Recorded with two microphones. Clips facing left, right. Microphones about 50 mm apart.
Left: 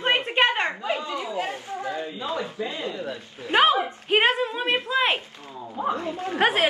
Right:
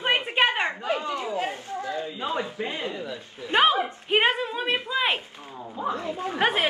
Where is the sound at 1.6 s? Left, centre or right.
Left.